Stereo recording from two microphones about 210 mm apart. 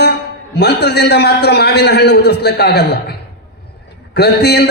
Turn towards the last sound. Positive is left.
turn(degrees=50)  # may be behind; listen again after turning